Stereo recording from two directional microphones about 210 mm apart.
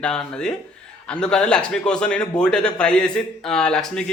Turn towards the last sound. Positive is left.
turn(degrees=5)  # may be behind; listen again after turning